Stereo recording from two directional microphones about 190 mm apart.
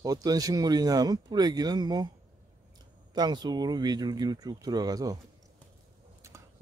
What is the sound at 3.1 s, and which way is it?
Speech, 20° right (ahead or behind).